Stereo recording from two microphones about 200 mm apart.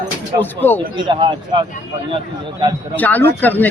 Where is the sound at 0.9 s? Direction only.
25° right (ahead or behind).